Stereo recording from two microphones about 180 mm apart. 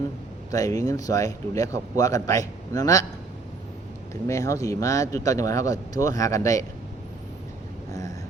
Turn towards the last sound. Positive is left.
turn(degrees=20)  # may be behind; listen again after turning